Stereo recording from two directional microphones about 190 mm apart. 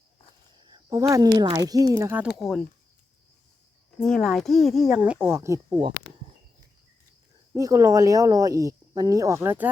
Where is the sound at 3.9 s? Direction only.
5° left (ahead or behind); by 5.9 s 20° right (ahead or behind).